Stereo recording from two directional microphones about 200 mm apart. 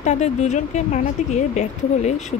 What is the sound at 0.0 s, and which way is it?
Speech, 35° left (ahead or behind).